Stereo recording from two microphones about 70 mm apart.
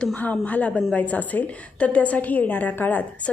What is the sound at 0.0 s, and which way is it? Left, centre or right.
Speech, left.